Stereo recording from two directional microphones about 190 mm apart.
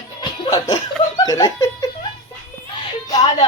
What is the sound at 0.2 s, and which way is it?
Laughter, 20° left (ahead or behind).